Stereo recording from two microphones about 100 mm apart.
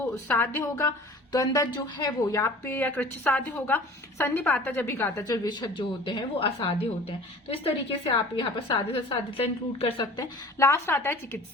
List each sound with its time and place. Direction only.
0.0 s a woman's voice: 20° left (ahead or behind)
1.3 s a woman's voice: 40° left (ahead or behind)
2.3 s a woman's voice: 25° left (ahead or behind)
5.2 s a woman's voice: 35° left (ahead or behind); by 9.1 s 70° left (ahead or behind)
10.6 s a woman's voice: 25° left (ahead or behind)